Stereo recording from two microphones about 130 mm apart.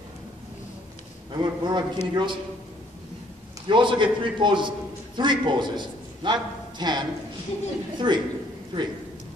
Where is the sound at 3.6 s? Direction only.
40° right (ahead or behind).